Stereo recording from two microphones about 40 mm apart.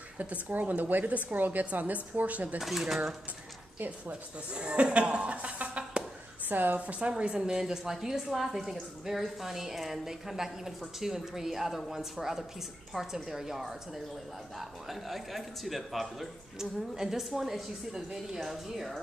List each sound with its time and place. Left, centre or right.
0.2 s a woman's voice: right
2.6 s speech: centre
4.1 s speech: right
6.4 s a woman's voice: right
6.9 s speech: right
7.3 s speech: centre